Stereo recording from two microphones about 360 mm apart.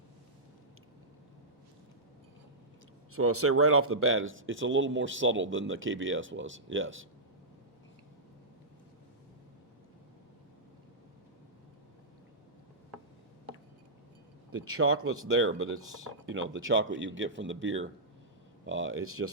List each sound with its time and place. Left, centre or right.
3.1 s speech: right
14.5 s speech: right